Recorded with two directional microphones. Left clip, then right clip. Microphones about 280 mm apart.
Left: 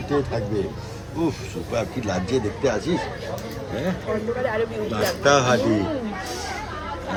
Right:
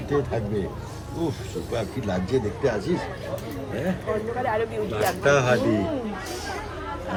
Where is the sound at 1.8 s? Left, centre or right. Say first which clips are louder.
Left 4 dB; centre.